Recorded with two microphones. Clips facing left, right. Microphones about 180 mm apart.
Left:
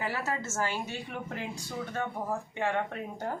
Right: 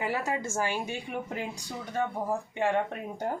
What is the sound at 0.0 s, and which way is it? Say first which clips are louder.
Speech: right 3 dB; 15° right (ahead or behind).